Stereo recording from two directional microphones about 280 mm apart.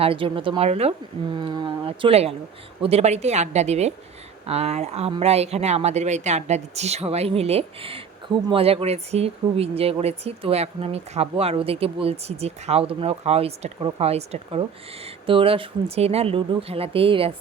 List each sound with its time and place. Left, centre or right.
0.0 s speech: centre